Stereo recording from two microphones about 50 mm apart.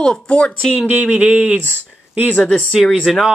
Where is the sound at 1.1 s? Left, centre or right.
Right.